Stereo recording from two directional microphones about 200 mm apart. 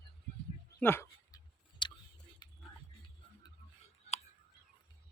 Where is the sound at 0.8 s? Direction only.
10° left (ahead or behind).